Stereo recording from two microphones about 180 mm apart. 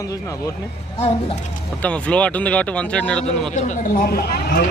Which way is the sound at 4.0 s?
55° left (ahead or behind).